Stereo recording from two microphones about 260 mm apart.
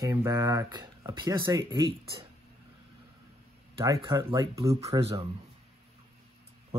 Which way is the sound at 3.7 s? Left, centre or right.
Centre.